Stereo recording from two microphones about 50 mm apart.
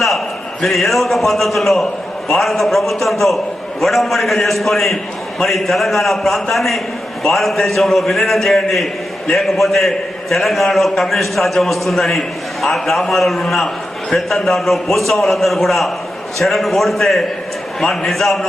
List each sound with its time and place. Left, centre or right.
0.6 s a man's voice: centre